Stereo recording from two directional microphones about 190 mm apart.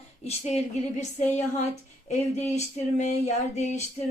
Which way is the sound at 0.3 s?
35° left (ahead or behind).